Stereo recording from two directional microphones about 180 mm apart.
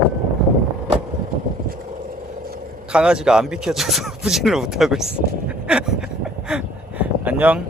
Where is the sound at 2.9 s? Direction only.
5° right (ahead or behind).